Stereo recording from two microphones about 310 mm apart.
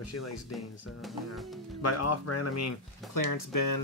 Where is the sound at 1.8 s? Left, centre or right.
Left.